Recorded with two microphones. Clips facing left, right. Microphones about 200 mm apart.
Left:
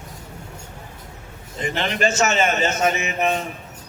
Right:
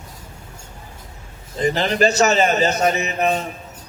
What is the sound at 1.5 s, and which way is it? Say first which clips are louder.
Speech: right 6 dB; 35° right (ahead or behind).